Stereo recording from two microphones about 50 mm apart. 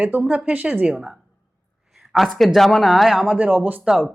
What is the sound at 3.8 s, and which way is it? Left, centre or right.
Speech, centre.